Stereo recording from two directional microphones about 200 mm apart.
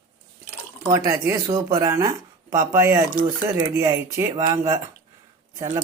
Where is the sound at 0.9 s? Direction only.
15° right (ahead or behind).